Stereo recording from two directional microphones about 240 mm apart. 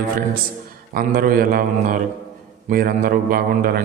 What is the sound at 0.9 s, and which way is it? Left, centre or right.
A man's voice, right.